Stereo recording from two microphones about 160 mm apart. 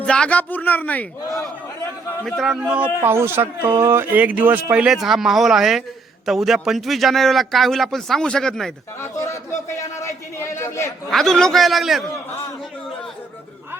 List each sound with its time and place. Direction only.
0.0 s a man's voice: 5° left (ahead or behind)
2.2 s a man's voice: centre (ahead or behind)
9.0 s a man's voice: 20° left (ahead or behind)
11.1 s a man's voice: centre (ahead or behind)